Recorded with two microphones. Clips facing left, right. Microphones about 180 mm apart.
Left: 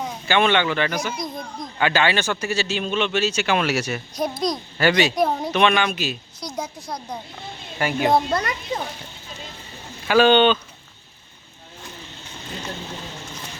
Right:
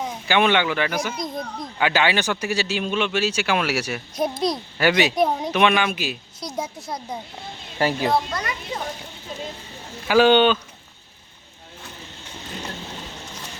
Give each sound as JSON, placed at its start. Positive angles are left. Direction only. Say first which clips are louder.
{"t": 0.0, "sound": "a man's voice", "louder": "even", "side_deg": -10}
{"t": 5.1, "sound": "a man's voice", "louder": "even", "side_deg": 0}
{"t": 7.8, "sound": "speech", "louder": "right 3 dB", "side_deg": -30}
{"t": 8.1, "sound": "a child's voice", "louder": "left 3 dB", "side_deg": 50}
{"t": 10.1, "sound": "a man's voice", "louder": "even", "side_deg": -10}